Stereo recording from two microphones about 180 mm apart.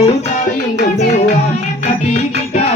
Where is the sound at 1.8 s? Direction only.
40° left (ahead or behind).